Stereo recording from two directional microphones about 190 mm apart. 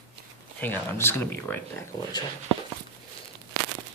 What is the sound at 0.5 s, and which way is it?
Speech, 10° left (ahead or behind).